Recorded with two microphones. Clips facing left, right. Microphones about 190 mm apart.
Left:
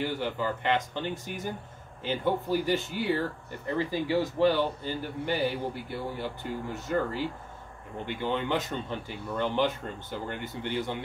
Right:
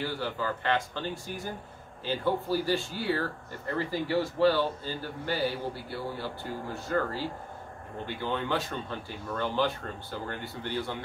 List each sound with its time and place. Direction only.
0.0 s speech: 20° left (ahead or behind)